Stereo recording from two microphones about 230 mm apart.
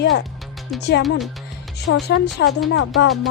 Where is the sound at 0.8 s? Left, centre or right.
Left.